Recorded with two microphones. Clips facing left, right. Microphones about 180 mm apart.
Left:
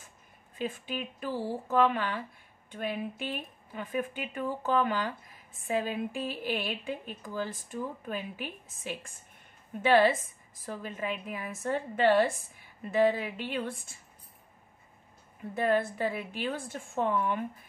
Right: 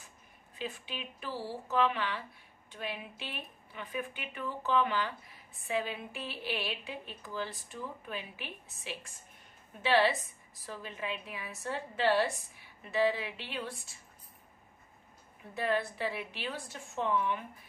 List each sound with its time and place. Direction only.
0.6 s a woman's voice: 50° left (ahead or behind)
15.5 s a woman's voice: 50° left (ahead or behind)